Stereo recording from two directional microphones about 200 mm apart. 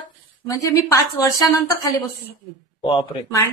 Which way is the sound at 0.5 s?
15° left (ahead or behind).